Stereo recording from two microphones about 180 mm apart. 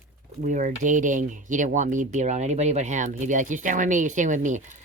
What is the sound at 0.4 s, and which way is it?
Speech, 45° right (ahead or behind).